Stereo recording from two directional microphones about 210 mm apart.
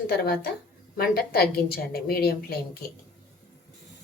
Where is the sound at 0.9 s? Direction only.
45° left (ahead or behind).